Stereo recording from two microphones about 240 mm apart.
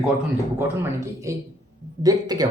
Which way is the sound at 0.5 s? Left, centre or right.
Centre.